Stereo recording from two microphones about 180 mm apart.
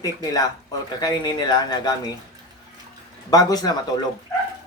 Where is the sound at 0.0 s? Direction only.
20° left (ahead or behind).